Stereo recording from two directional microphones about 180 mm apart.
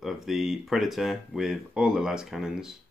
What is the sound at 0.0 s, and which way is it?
Speech, centre (ahead or behind).